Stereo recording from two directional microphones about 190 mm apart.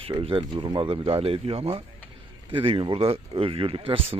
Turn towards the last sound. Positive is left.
turn(degrees=-30)  # may be behind; listen again after turning